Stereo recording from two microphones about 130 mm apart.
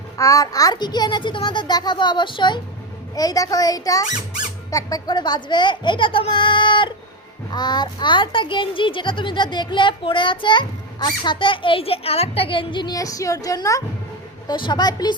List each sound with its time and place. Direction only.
0.2 s a child's voice: 25° left (ahead or behind)
14.4 s a child's voice: 35° left (ahead or behind)